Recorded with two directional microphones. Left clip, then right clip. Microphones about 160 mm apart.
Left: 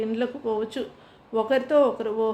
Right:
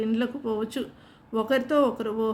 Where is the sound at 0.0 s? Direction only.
30° right (ahead or behind).